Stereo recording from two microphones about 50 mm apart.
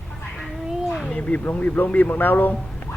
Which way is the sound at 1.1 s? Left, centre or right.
Left.